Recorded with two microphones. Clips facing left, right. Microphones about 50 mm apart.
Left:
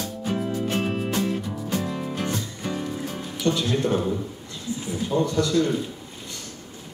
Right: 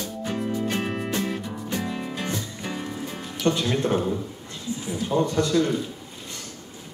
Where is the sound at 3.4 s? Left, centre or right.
Right.